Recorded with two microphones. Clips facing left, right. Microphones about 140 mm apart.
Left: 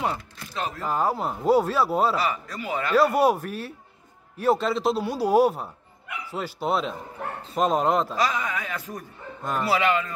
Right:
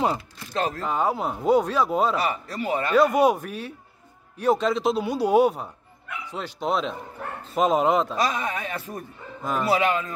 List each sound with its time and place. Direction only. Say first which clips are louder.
0.5 s speech: right 5 dB; 40° right (ahead or behind)
0.8 s speech: left 3 dB; centre (ahead or behind)
2.2 s a man's voice: right 2 dB; 30° right (ahead or behind)
2.9 s speech: right 1 dB; centre (ahead or behind)
8.2 s a man's voice: even; 25° right (ahead or behind)
9.4 s speech: right 1 dB; centre (ahead or behind)
9.7 s a man's voice: even; 20° right (ahead or behind)